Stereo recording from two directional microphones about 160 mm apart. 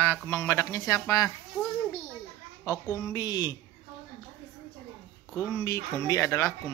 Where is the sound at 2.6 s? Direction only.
20° left (ahead or behind).